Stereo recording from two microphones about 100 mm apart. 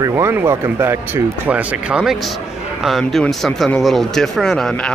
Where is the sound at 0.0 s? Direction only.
25° right (ahead or behind).